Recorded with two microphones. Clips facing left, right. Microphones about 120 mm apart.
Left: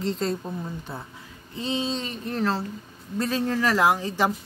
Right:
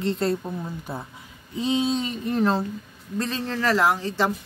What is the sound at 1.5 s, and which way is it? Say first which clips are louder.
Speech: right 5 dB; 15° right (ahead or behind).